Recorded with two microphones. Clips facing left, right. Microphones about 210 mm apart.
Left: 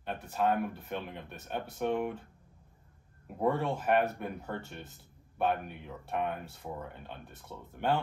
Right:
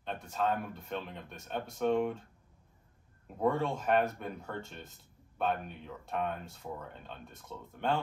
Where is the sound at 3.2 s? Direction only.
5° left (ahead or behind).